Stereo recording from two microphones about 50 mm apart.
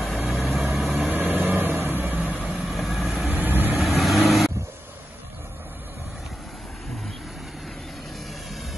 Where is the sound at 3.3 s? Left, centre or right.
Right.